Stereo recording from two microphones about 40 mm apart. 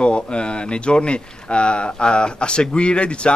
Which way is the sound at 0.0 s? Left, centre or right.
Left.